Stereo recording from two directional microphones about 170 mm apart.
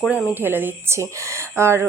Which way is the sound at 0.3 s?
10° right (ahead or behind).